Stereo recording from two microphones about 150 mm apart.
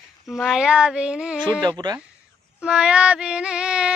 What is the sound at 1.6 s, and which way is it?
Speech, 30° right (ahead or behind).